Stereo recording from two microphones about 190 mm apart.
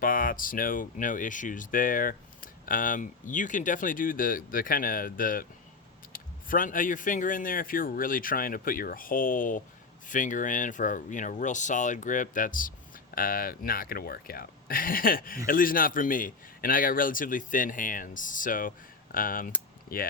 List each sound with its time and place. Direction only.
0.0 s speech: 45° left (ahead or behind)